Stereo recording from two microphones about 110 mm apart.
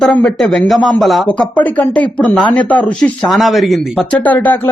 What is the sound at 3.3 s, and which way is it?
Speech, centre (ahead or behind).